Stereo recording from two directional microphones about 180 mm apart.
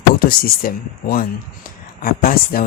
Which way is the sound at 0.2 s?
55° left (ahead or behind).